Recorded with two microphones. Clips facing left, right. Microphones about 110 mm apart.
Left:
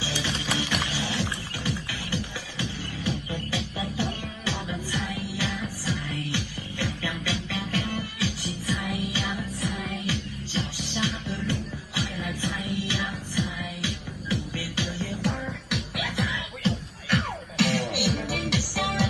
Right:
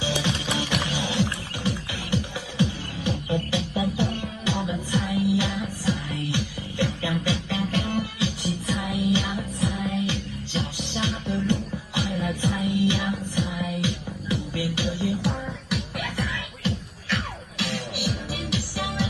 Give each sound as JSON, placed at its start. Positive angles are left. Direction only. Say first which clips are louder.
{"t": 0.0, "sound": "music", "louder": "right 4 dB", "side_deg": -30}
{"t": 15.2, "sound": "music", "louder": "right 1 dB", "side_deg": 0}
{"t": 17.6, "sound": "music", "louder": "left 5 dB", "side_deg": 70}